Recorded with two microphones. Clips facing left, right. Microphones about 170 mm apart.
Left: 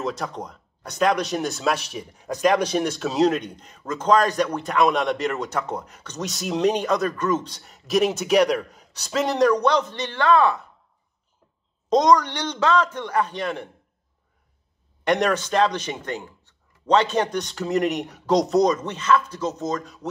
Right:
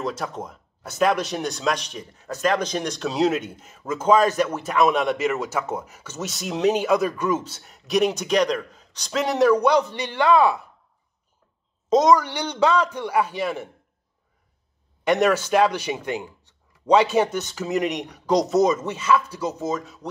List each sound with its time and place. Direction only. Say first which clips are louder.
0.0 s speech: even; centre (ahead or behind)
11.9 s speech: even; 5° right (ahead or behind)
15.0 s speech: right 2 dB; 5° right (ahead or behind)